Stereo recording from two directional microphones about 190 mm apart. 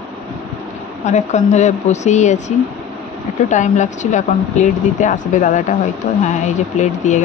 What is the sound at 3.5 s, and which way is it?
Speech, 40° left (ahead or behind).